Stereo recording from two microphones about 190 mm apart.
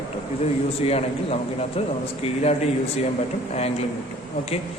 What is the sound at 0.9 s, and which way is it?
Speech, 30° left (ahead or behind).